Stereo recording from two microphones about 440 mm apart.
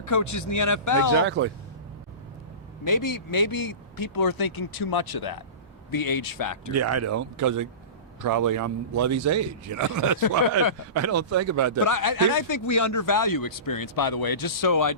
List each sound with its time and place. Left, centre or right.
0.0 s speech: left
1.1 s speech: right
2.8 s speech: left
6.7 s a man's voice: right
10.2 s speech: left
10.9 s a man's voice: right
11.8 s speech: left